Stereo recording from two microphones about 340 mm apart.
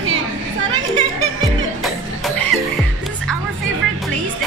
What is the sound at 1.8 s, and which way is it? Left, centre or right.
Music, centre.